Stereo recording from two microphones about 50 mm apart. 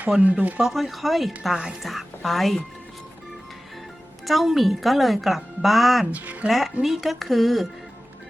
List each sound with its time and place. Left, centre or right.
0.2 s speech: right
0.6 s speech: centre
4.3 s speech: centre
6.1 s speech: right
6.5 s speech: centre